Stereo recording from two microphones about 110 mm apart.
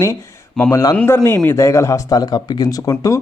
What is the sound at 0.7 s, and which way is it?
Speech, 30° left (ahead or behind).